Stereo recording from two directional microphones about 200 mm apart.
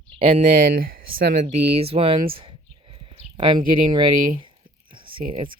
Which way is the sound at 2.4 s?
25° right (ahead or behind).